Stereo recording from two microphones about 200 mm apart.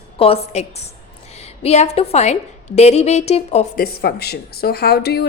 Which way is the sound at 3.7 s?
50° left (ahead or behind).